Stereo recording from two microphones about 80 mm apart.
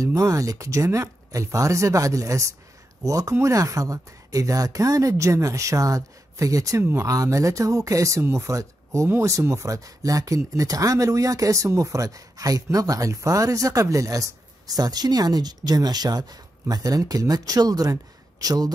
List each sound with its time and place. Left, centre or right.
0.0 s speech: right